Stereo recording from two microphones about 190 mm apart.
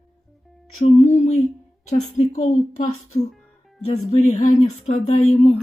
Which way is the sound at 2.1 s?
40° left (ahead or behind).